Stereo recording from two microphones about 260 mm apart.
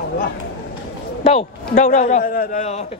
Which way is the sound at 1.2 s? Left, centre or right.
Left.